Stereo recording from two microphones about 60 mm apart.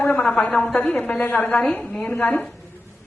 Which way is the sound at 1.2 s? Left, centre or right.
Left.